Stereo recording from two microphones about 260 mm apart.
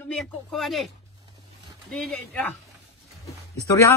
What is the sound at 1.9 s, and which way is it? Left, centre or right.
Speech, centre.